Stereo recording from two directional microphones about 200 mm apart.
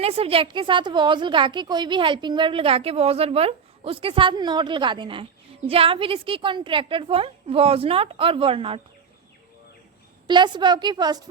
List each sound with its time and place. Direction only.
0.0 s a woman's voice: 30° right (ahead or behind)
10.2 s a woman's voice: 25° right (ahead or behind)